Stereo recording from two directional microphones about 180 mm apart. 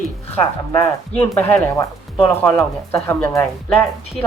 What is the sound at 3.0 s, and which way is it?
Speech, 10° left (ahead or behind).